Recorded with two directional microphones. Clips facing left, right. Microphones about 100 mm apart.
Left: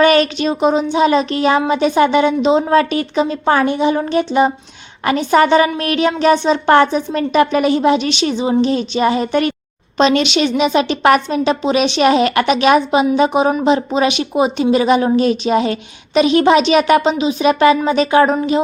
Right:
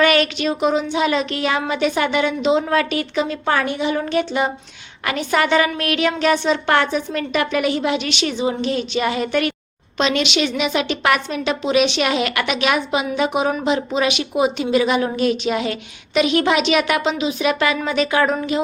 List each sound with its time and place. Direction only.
0.0 s speech: 30° left (ahead or behind)